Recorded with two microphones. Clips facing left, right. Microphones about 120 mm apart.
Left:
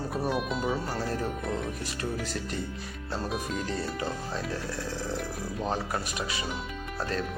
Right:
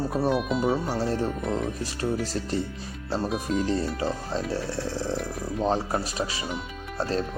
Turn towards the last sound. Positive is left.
turn(degrees=-30)  # may be behind; listen again after turning